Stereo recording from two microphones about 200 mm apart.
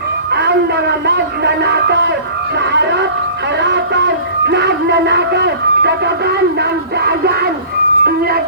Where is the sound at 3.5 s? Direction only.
60° right (ahead or behind).